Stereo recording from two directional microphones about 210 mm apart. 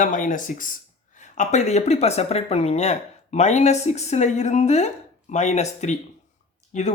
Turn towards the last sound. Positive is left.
turn(degrees=35)  # may be behind; listen again after turning